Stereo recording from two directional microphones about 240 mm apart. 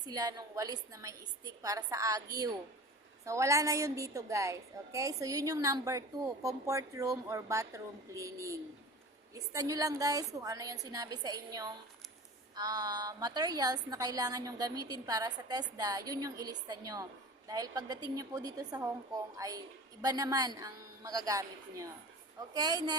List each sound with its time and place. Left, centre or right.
0.0 s a woman's voice: centre